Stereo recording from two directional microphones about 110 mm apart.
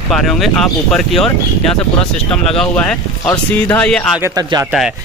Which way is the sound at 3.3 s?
20° left (ahead or behind).